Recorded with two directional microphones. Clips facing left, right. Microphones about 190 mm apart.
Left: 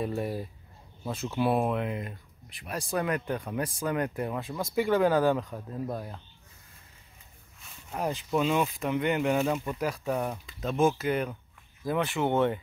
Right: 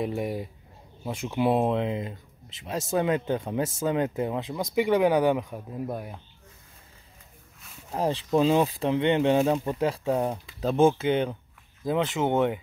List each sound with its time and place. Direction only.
0.0 s speech: 15° right (ahead or behind)
7.9 s speech: 30° right (ahead or behind); by 12.5 s 15° right (ahead or behind)